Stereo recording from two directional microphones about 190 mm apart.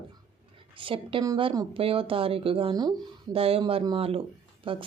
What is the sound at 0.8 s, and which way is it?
Speech, 25° right (ahead or behind).